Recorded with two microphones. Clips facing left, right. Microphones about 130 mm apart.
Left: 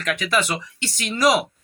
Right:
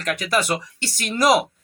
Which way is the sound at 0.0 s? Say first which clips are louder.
Even; 40° right (ahead or behind).